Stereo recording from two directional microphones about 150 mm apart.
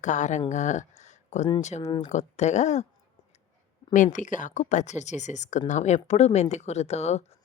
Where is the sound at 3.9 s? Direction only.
55° left (ahead or behind).